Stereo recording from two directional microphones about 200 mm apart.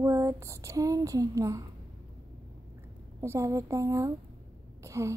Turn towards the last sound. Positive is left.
turn(degrees=-15)  # may be behind; listen again after turning